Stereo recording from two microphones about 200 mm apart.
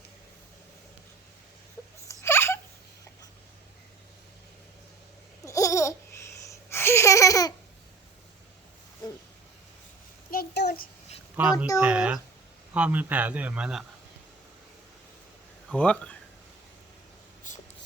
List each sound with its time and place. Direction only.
2.0 s a sound: 10° left (ahead or behind)
5.5 s babbling: 15° left (ahead or behind)
10.3 s a sound: 55° left (ahead or behind)
11.5 s speech: 15° left (ahead or behind)
11.8 s speech: 5° right (ahead or behind)
15.7 s speech: 5° left (ahead or behind)